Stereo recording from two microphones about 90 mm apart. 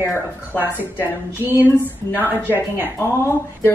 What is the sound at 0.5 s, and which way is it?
A woman's voice, 20° right (ahead or behind).